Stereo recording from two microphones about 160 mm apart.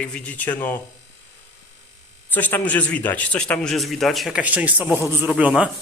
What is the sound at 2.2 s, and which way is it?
Speech, 10° left (ahead or behind).